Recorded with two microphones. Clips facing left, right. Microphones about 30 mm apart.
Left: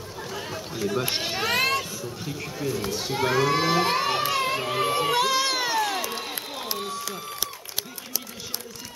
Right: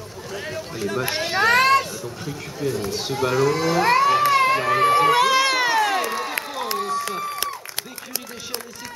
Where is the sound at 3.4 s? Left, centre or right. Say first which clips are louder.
Right 2 dB; left.